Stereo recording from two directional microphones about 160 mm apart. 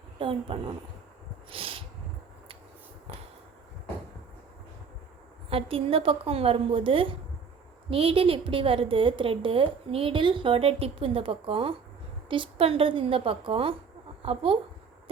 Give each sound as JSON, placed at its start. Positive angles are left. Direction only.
{"t": 0.2, "sound": "a woman's voice", "side_deg": -35}
{"t": 1.5, "sound": "a sound", "side_deg": -35}
{"t": 5.5, "sound": "a woman's voice", "side_deg": -35}